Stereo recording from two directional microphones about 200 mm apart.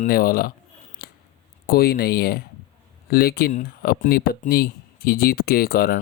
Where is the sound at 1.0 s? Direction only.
50° left (ahead or behind).